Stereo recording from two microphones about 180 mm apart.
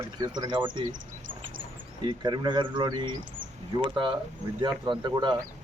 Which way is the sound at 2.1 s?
25° right (ahead or behind).